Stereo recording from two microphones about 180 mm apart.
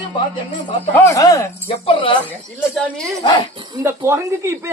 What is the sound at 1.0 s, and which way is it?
Speech, 15° left (ahead or behind).